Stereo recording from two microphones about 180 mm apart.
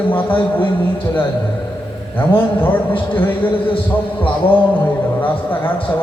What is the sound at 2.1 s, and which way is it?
A man's voice, 10° left (ahead or behind).